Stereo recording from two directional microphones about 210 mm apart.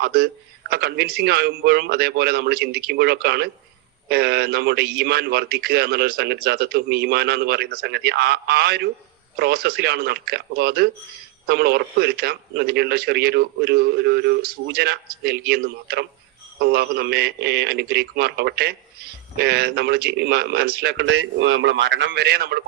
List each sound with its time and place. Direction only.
0.0 s a man's voice: 50° right (ahead or behind)
21.1 s a man's voice: 80° right; by 22.6 s 50° right (ahead or behind)